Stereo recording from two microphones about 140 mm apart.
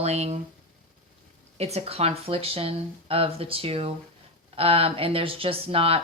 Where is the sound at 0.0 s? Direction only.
50° right (ahead or behind).